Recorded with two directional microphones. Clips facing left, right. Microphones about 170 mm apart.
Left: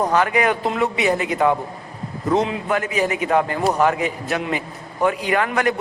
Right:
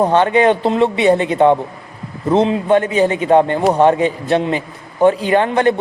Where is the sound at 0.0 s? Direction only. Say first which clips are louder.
Right 6 dB; 30° right (ahead or behind).